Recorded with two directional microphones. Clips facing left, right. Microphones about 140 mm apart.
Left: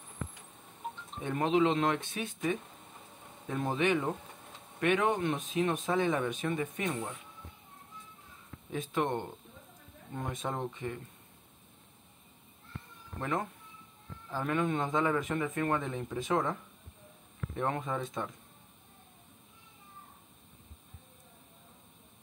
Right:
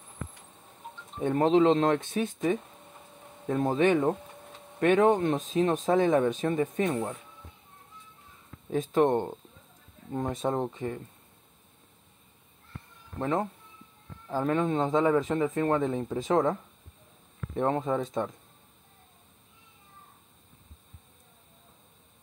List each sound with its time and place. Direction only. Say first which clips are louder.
1.2 s speech: right 6 dB; 35° right (ahead or behind)
8.6 s speech: right 8 dB; 40° right (ahead or behind)
13.2 s speech: right 6 dB; 30° right (ahead or behind)
17.6 s speech: right 6 dB; 30° right (ahead or behind)